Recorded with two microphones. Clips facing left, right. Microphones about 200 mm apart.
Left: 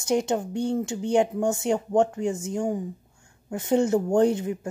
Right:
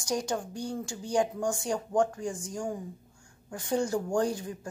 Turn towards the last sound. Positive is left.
turn(degrees=25)  # may be behind; listen again after turning